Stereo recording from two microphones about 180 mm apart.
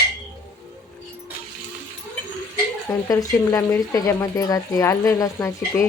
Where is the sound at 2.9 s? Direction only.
20° left (ahead or behind).